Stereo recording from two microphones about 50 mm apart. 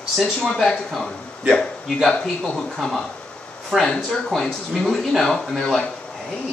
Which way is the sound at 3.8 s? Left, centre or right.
Centre.